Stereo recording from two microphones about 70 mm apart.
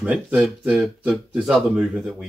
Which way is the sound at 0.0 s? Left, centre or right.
Centre.